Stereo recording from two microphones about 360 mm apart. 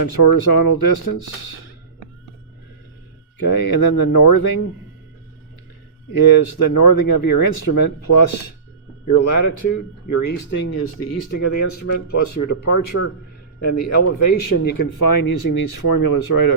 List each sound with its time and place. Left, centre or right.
0.0 s speech: left
3.4 s speech: left
6.6 s speech: left
9.0 s speech: left